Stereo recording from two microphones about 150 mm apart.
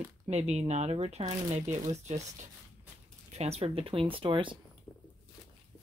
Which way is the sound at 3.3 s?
45° right (ahead or behind).